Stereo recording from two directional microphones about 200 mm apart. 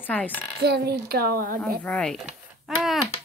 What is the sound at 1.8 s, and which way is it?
Speech, 5° left (ahead or behind).